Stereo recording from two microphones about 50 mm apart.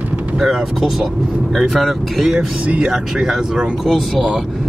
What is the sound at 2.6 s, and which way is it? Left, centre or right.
Speech, right.